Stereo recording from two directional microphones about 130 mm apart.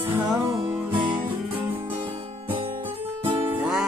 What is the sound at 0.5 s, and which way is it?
Music, 35° right (ahead or behind).